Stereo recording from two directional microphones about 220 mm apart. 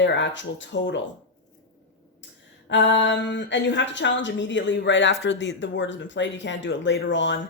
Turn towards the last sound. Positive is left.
turn(degrees=55)  # may be behind; listen again after turning